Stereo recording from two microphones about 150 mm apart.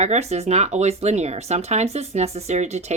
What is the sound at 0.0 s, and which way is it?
Speech, 50° right (ahead or behind).